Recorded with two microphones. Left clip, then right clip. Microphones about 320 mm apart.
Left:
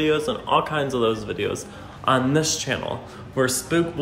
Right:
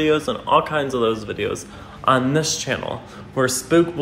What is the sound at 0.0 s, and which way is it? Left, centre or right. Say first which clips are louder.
A man's voice: right 2 dB; centre.